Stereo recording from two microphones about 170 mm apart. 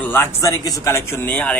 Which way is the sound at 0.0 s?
15° left (ahead or behind).